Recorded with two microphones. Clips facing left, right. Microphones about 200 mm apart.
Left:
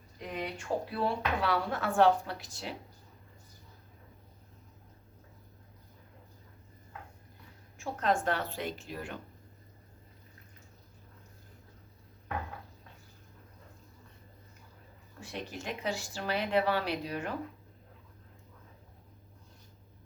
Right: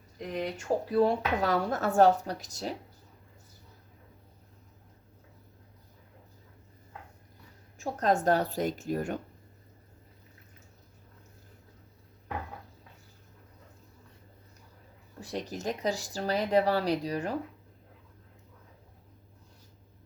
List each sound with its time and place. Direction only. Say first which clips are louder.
0.6 s speech: right 8 dB; 40° right (ahead or behind)
7.9 s speech: right 4 dB; 40° right (ahead or behind)
15.2 s speech: right 6 dB; 40° right (ahead or behind)